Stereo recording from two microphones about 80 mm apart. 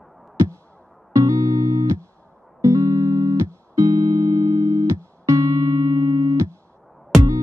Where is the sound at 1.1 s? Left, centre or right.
Right.